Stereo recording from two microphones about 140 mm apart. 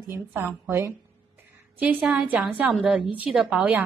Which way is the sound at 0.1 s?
15° right (ahead or behind).